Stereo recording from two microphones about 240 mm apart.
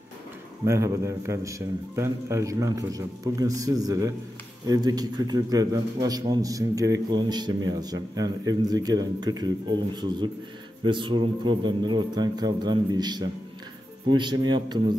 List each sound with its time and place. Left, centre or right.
0.7 s a man's voice: centre